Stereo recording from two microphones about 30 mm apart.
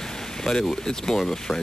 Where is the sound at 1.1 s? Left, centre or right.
Centre.